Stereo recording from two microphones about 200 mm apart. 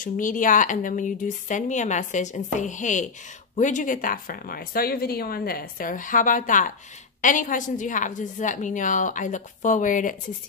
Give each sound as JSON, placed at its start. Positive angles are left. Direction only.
{"t": 0.0, "sound": "speech", "side_deg": 40}